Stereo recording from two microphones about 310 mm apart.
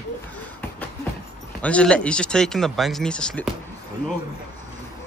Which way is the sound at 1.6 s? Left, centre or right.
Centre.